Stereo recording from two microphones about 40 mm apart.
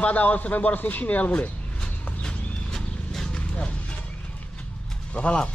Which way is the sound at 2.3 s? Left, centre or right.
Left.